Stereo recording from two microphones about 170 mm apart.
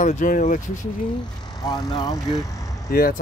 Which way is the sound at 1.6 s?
25° left (ahead or behind).